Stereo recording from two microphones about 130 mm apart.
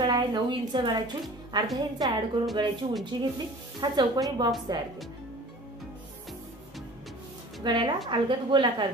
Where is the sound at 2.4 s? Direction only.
40° right (ahead or behind).